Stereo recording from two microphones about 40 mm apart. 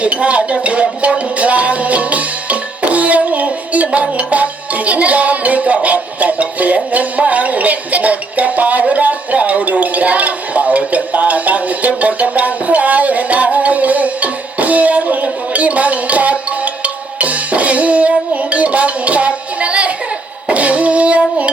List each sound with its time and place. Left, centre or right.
0.0 s cutlery: right
1.4 s music: right